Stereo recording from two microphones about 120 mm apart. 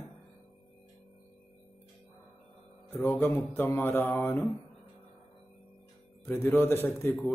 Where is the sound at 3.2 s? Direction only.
15° left (ahead or behind).